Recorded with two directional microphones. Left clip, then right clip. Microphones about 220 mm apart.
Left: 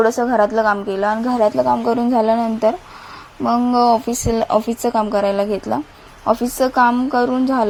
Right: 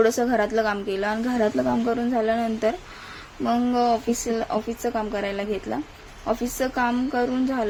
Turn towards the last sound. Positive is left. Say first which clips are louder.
# left 7 dB
turn(degrees=20)  # may be behind; listen again after turning